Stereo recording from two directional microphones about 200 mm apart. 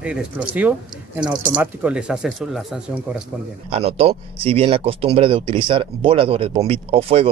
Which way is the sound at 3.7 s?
30° right (ahead or behind).